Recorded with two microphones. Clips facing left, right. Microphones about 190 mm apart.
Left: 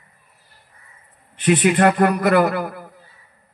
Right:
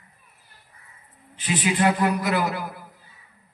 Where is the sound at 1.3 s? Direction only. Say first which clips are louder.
Left 8 dB; 60° left (ahead or behind).